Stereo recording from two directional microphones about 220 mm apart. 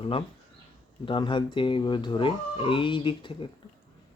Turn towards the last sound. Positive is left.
turn(degrees=20)  # may be behind; listen again after turning